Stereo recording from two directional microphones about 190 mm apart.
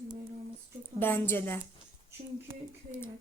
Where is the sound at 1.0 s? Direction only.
10° left (ahead or behind).